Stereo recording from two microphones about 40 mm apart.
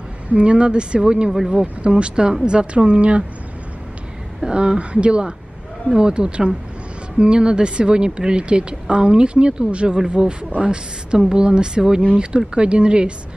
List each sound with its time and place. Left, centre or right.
0.3 s speech: right
4.4 s speech: right